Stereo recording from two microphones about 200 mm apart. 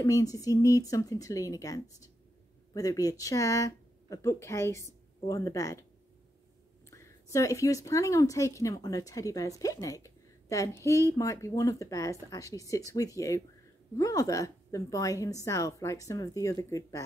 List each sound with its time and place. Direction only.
0.0 s a woman's voice: 15° left (ahead or behind)
6.9 s a woman's voice: 15° left (ahead or behind)